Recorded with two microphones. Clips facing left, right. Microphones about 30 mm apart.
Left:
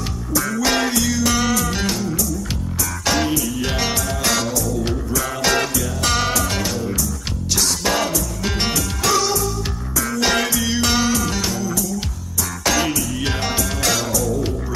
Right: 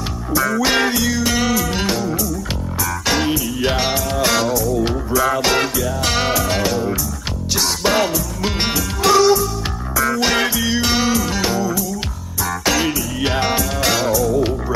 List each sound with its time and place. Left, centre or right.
0.3 s music: centre